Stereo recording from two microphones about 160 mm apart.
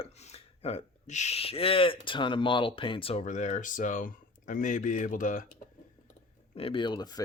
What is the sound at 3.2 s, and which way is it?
Speech, 50° left (ahead or behind).